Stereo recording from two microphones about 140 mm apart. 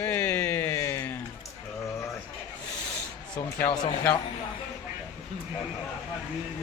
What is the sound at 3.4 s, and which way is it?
Speech, 15° left (ahead or behind).